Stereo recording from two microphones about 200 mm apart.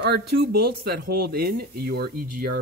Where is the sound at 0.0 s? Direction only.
55° right (ahead or behind).